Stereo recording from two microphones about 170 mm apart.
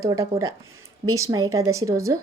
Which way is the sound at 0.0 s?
20° right (ahead or behind).